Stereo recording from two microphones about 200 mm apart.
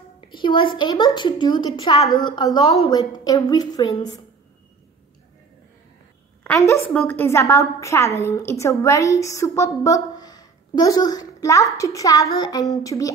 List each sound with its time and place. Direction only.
0.3 s a woman's voice: 25° left (ahead or behind)
6.4 s a woman's voice: 10° left (ahead or behind)